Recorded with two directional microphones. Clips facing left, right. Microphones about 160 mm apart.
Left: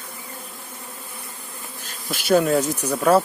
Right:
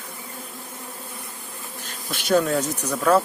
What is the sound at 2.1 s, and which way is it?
Speech, 5° left (ahead or behind).